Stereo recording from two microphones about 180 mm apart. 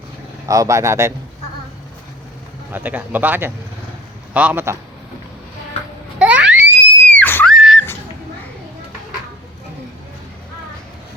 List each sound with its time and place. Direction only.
0.4 s speech: 20° right (ahead or behind)
2.7 s speech: 10° right (ahead or behind)
6.1 s music: 5° right (ahead or behind)
7.0 s screaming: 10° left (ahead or behind)